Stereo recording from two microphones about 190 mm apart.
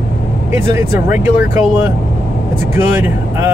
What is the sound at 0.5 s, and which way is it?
Speech, 10° right (ahead or behind).